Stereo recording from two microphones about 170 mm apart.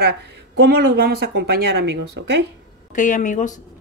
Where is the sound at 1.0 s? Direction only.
70° right (ahead or behind); by 2.4 s 90° right.